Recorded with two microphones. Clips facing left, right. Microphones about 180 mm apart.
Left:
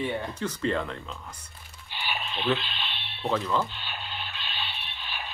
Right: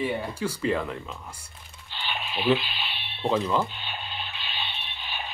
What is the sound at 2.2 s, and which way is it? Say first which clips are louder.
Speech: right 5 dB; 5° right (ahead or behind).